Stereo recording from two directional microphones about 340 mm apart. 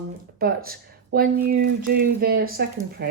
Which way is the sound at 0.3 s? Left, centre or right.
Right.